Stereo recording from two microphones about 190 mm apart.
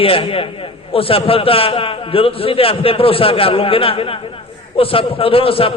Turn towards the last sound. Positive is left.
turn(degrees=30)  # may be behind; listen again after turning